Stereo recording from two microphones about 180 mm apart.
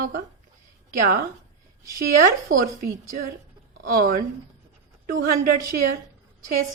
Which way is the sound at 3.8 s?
50° right (ahead or behind).